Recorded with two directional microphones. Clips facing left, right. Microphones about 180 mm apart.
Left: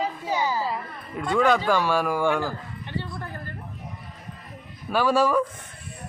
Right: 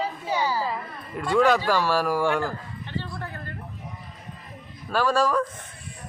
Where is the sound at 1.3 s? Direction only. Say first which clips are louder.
Even; 5° right (ahead or behind).